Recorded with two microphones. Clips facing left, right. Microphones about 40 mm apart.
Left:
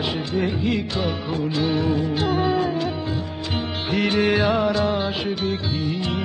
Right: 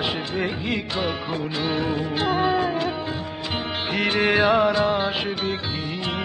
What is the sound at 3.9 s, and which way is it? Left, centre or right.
Music, centre.